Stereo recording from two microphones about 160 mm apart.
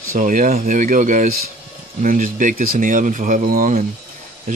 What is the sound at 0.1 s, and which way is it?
Speech, 55° right (ahead or behind).